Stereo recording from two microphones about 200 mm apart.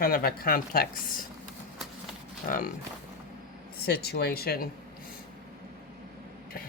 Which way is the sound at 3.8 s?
50° left (ahead or behind).